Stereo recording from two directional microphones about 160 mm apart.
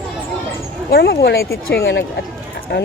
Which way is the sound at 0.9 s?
85° left.